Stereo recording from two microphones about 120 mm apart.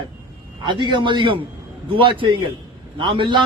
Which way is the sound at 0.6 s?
40° right (ahead or behind).